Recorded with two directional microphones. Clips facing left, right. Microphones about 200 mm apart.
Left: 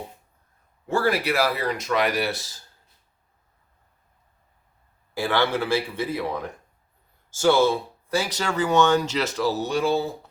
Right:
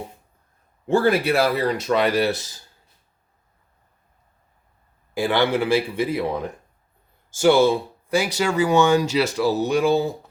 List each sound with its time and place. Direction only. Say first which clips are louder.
0.9 s speech: right 5 dB; 25° right (ahead or behind)
5.1 s speech: right 3 dB; 15° right (ahead or behind)